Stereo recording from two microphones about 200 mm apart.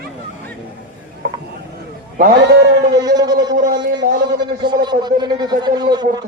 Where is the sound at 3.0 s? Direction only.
20° right (ahead or behind).